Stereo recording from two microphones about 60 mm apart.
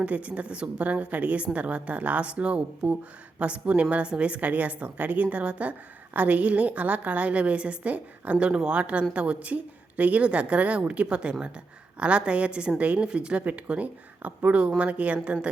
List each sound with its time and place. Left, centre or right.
0.0 s speech: right